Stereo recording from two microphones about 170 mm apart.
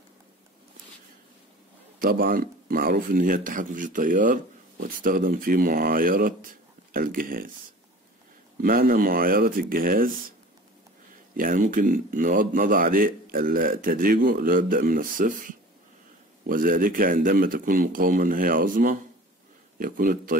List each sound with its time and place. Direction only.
2.0 s speech: 55° right (ahead or behind)
8.5 s speech: 60° right (ahead or behind)
11.3 s speech: 50° right (ahead or behind)